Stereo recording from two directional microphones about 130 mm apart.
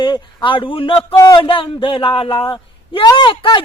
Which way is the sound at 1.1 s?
25° left (ahead or behind).